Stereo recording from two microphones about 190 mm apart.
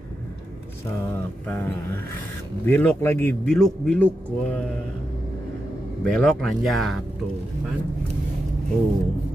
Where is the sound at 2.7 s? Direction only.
10° left (ahead or behind).